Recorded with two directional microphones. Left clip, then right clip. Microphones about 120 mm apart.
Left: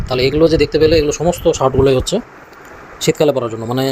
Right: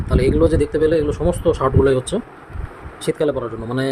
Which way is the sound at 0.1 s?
20° left (ahead or behind).